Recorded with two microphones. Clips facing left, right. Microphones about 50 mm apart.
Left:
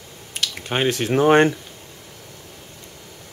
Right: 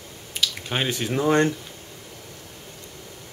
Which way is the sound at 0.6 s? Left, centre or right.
Left.